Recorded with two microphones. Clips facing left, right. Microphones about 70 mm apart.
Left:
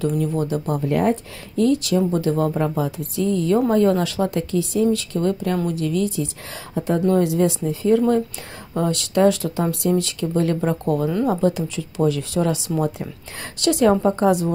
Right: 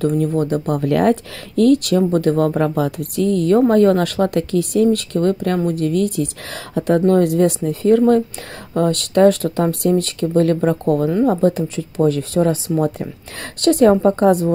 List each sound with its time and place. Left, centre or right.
0.2 s speech: right
1.6 s speech: right